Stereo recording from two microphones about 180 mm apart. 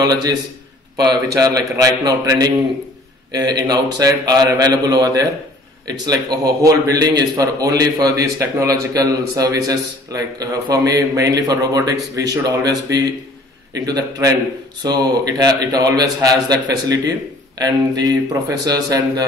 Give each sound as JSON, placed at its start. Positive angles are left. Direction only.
{"t": 0.0, "sound": "speech", "side_deg": -20}